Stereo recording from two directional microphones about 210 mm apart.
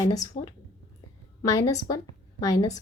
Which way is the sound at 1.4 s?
15° left (ahead or behind).